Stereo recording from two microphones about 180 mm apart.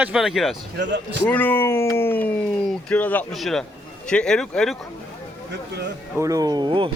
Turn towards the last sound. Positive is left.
turn(degrees=-25)  # may be behind; listen again after turning